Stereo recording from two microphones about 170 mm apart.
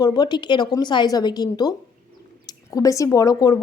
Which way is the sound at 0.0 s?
25° left (ahead or behind).